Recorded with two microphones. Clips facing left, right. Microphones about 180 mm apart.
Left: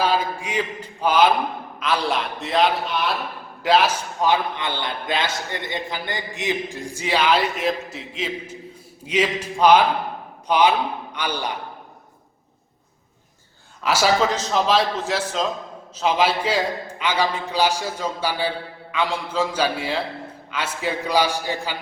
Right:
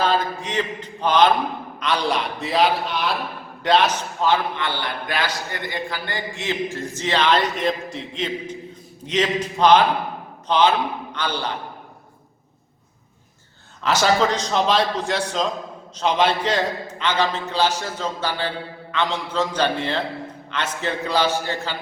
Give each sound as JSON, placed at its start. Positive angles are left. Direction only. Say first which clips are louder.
{"t": 0.0, "sound": "a man's voice", "louder": "even", "side_deg": 10}
{"t": 13.8, "sound": "a man's voice", "louder": "right 1 dB", "side_deg": 5}